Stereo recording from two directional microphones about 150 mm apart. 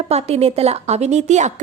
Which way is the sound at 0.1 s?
45° right (ahead or behind).